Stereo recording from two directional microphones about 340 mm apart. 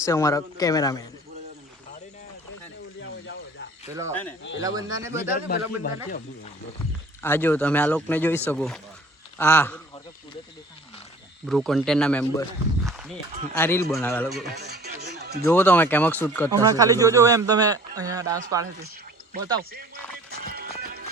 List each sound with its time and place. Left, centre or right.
0.0 s a man's voice: centre
3.0 s a sound: left
4.1 s speech: centre
4.6 s speech: centre
5.3 s a man's voice: left
7.2 s a man's voice: centre
11.4 s speech: centre
14.5 s music: right
15.4 s speech: centre
16.5 s speech: centre
20.5 s music: right